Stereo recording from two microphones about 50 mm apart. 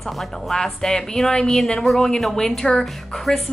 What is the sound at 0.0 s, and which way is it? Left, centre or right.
A woman's voice, centre.